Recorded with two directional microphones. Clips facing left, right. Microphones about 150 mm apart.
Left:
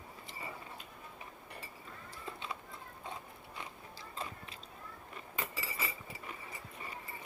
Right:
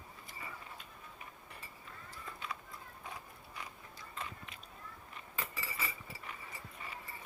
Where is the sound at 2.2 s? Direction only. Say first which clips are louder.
Left 2 dB; 25° left (ahead or behind).